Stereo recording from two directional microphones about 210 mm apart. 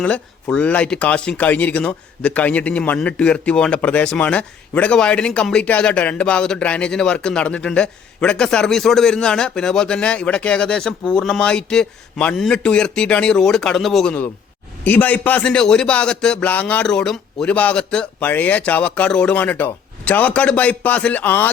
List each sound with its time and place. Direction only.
0.0 s a man's voice: 5° left (ahead or behind)